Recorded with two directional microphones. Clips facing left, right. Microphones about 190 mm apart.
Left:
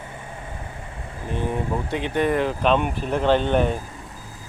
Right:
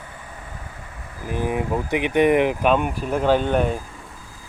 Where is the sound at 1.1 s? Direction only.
25° left (ahead or behind).